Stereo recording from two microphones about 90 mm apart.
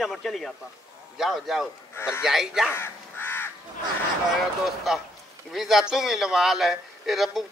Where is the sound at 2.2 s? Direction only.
5° right (ahead or behind).